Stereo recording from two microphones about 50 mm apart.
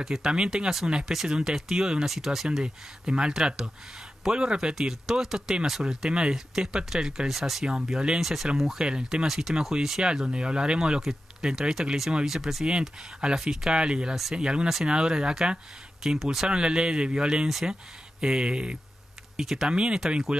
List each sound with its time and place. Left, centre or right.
0.0 s speech: centre
7.6 s speech: centre
8.2 s speech: centre
8.7 s speech: centre
13.2 s speech: centre
16.4 s speech: centre
17.5 s speech: centre
18.2 s speech: centre